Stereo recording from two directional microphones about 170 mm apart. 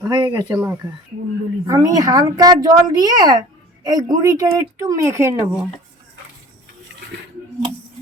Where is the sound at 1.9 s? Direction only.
20° right (ahead or behind).